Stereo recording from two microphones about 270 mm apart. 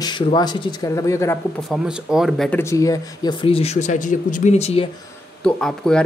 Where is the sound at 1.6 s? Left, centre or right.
Centre; by 4.9 s left.